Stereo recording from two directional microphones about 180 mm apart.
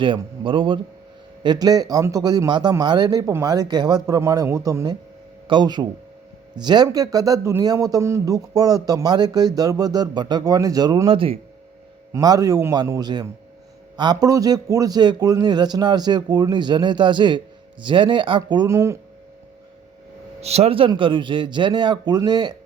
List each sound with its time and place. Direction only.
0.0 s a man's voice: 25° right (ahead or behind)
11.1 s a man's voice: 30° right (ahead or behind)
12.1 s a man's voice: 20° right (ahead or behind)
20.4 s a man's voice: 35° right (ahead or behind)